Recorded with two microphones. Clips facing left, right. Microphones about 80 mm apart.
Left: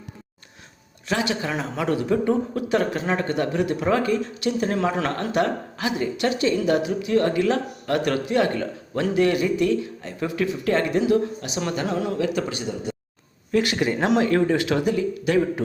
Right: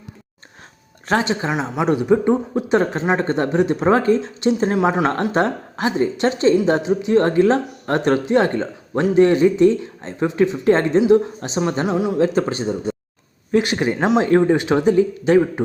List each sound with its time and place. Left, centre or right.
1.2 s speech: right
12.2 s speech: right